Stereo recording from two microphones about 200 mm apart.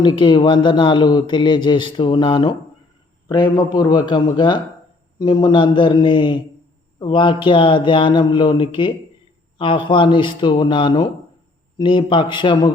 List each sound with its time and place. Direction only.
0.0 s a man's voice: 25° left (ahead or behind)